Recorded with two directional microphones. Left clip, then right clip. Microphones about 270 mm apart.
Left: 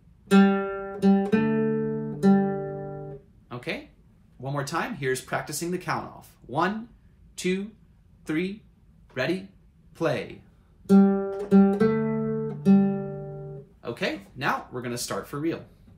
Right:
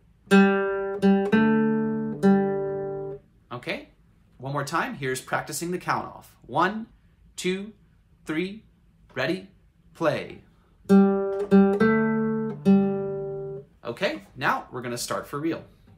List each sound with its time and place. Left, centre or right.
0.3 s music: right
3.4 s a sound: centre
4.4 s speech: centre
10.9 s guitar: centre
13.7 s speech: centre